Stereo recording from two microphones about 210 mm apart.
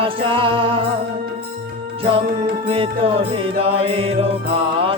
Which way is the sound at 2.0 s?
25° right (ahead or behind).